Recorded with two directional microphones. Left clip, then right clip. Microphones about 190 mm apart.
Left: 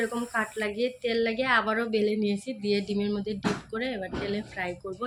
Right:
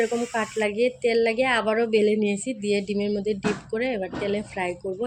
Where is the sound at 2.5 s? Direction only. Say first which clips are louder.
Right 3 dB; 35° left (ahead or behind).